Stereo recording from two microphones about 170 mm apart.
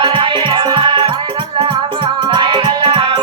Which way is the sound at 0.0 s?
30° right (ahead or behind).